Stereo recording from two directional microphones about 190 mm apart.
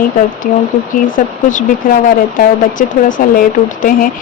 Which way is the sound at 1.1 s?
45° left (ahead or behind).